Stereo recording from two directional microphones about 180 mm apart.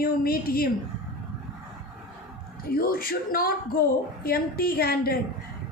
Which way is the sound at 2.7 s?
55° left (ahead or behind).